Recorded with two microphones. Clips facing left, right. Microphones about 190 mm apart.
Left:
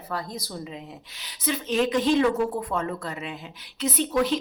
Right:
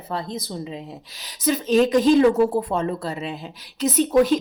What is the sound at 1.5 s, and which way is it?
A woman's voice, 40° right (ahead or behind).